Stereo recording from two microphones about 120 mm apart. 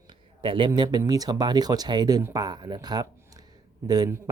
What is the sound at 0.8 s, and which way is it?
Speech, 35° right (ahead or behind).